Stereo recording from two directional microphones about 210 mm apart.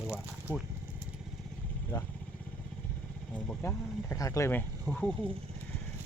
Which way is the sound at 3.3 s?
10° left (ahead or behind).